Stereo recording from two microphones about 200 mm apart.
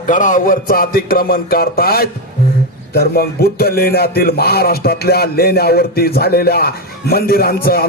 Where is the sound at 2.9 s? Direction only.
50° left (ahead or behind).